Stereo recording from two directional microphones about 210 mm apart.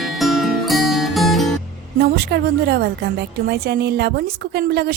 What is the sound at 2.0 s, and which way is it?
A woman's voice, 50° right (ahead or behind).